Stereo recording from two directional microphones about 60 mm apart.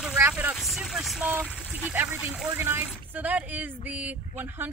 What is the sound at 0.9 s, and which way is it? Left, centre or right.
Vehicle, centre.